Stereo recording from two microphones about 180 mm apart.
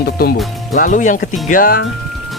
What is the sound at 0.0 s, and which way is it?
Speech, 60° left (ahead or behind).